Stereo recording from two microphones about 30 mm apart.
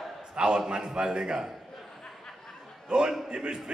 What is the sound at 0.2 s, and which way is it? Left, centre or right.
A man's voice, right.